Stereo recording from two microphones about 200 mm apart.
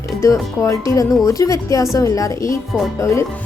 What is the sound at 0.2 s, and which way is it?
A woman's voice, 15° left (ahead or behind).